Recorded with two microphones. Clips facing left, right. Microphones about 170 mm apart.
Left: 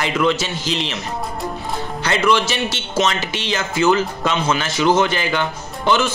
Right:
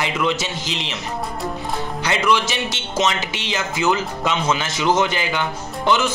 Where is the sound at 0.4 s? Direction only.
20° right (ahead or behind).